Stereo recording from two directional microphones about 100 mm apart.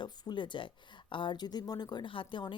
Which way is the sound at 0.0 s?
50° left (ahead or behind).